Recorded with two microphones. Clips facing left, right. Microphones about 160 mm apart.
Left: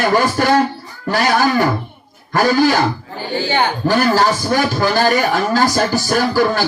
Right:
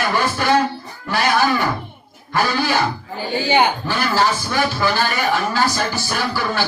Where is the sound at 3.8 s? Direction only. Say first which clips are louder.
Left 5 dB; 40° left (ahead or behind).